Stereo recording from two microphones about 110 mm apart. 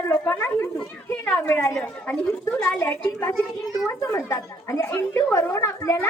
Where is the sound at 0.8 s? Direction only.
10° left (ahead or behind).